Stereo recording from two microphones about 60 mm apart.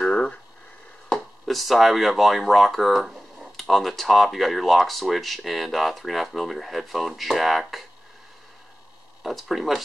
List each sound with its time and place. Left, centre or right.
0.0 s a sound: centre
1.0 s speech: centre
9.2 s speech: centre